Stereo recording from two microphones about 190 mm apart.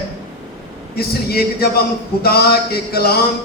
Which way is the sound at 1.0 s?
55° left (ahead or behind).